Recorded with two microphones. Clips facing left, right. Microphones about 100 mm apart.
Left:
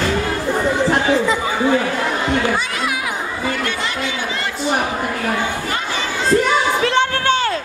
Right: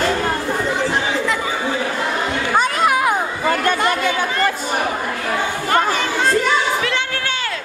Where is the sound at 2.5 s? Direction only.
50° right (ahead or behind).